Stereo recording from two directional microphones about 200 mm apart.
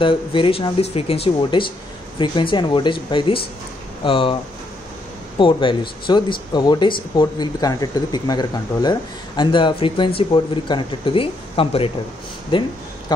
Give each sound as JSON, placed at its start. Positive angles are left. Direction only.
{"t": 0.0, "sound": "speech", "side_deg": 25}
{"t": 5.4, "sound": "speech", "side_deg": 25}